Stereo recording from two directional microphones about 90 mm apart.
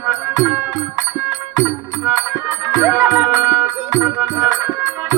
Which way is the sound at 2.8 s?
25° right (ahead or behind).